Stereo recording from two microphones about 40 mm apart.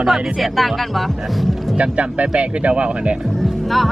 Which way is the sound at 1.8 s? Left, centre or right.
Right.